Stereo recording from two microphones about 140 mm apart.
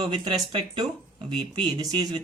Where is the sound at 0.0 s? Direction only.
35° right (ahead or behind).